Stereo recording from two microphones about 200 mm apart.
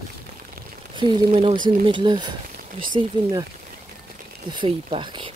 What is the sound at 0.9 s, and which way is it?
Speech, 25° right (ahead or behind).